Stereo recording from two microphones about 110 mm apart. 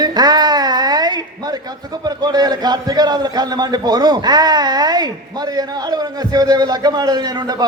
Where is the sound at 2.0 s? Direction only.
35° right (ahead or behind).